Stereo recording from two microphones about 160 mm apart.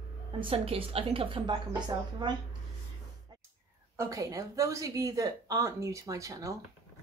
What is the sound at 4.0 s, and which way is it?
Speech, 20° right (ahead or behind).